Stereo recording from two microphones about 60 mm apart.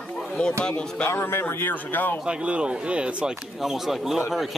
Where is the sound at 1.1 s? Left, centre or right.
Left.